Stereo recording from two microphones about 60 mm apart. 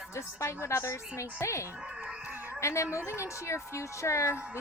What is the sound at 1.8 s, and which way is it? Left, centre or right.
Dog, right.